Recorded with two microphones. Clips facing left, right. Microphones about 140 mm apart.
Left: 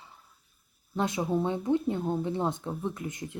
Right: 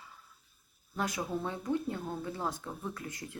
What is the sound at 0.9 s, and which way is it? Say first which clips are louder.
Speech: left 6 dB; 25° left (ahead or behind).